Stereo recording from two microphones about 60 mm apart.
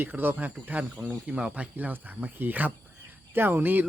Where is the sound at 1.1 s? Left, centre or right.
Centre.